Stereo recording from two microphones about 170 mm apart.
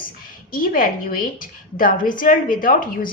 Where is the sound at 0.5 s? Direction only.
55° left (ahead or behind).